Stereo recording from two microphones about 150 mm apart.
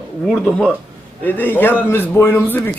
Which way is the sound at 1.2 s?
15° left (ahead or behind).